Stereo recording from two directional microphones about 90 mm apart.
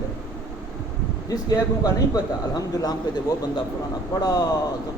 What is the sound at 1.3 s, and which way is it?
Speech, 45° left (ahead or behind).